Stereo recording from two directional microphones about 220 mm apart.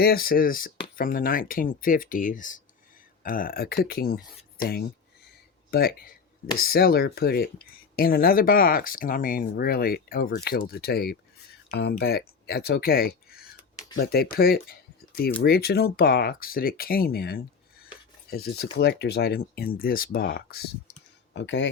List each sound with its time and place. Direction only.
0.0 s speech: 45° left (ahead or behind)
21.3 s speech: 55° left (ahead or behind)